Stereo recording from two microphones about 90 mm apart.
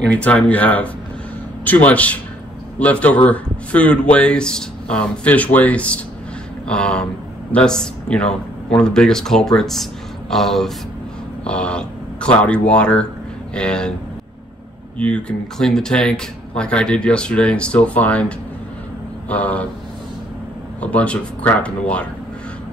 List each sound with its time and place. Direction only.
0.1 s speech: 15° left (ahead or behind)
15.0 s speech: 15° left (ahead or behind)
19.2 s speech: 15° left (ahead or behind)
20.8 s speech: 15° left (ahead or behind)